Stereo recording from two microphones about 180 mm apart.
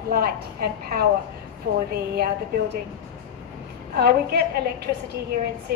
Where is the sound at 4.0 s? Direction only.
60° right (ahead or behind).